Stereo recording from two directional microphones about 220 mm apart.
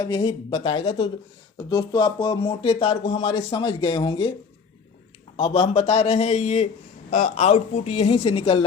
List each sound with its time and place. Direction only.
0.0 s speech: 20° left (ahead or behind)
5.4 s speech: 25° left (ahead or behind)